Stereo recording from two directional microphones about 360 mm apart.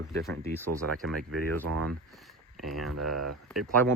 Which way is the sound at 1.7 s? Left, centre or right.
Right.